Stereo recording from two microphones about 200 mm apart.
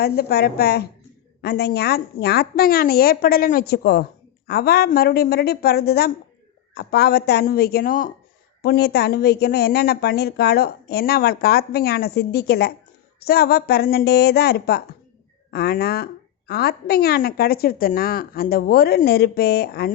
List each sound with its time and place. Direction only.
0.0 s a woman's voice: 50° left (ahead or behind)
8.6 s a woman's voice: 55° left (ahead or behind)